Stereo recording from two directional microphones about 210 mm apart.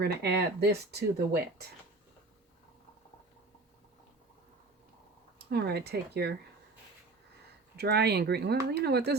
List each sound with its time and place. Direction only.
0.0 s speech: 50° right (ahead or behind)
5.5 s speech: 50° right (ahead or behind)
7.8 s speech: 50° right (ahead or behind)